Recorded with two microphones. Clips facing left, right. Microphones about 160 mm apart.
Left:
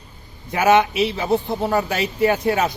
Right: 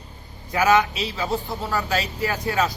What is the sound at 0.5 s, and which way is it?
A woman's voice, 25° left (ahead or behind).